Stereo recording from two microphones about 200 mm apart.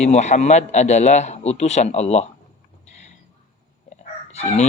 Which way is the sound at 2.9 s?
35° left (ahead or behind).